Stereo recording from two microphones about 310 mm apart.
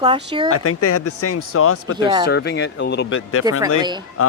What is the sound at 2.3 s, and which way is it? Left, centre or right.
Speech, left.